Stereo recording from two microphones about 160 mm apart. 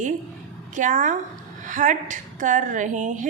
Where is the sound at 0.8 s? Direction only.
50° right (ahead or behind).